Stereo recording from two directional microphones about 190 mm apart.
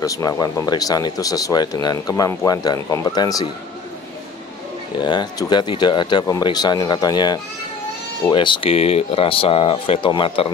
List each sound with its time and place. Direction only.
0.0 s speech: 15° left (ahead or behind)
5.0 s speech: 20° left (ahead or behind)